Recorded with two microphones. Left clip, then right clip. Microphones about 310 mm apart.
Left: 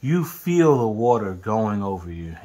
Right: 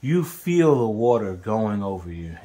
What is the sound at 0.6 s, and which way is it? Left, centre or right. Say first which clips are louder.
Speech: left 1 dB; left.